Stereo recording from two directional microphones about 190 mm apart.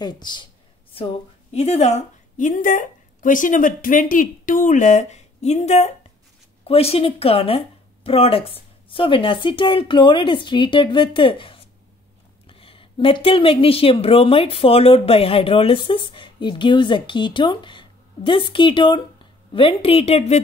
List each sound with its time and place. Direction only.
0.0 s a woman's voice: 25° left (ahead or behind)